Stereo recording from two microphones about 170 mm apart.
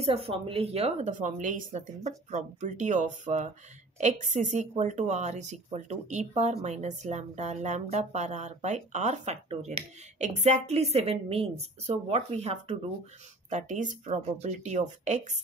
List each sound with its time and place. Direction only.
0.0 s speech: 35° right (ahead or behind)